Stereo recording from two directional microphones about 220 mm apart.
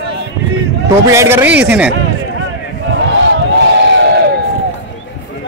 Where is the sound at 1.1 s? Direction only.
10° right (ahead or behind).